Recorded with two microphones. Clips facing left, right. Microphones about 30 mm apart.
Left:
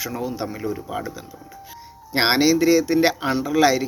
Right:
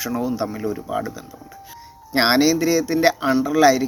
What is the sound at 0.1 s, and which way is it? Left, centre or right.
Speech, centre.